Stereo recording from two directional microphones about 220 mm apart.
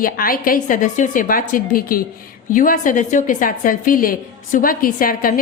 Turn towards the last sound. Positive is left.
turn(degrees=40)  # may be behind; listen again after turning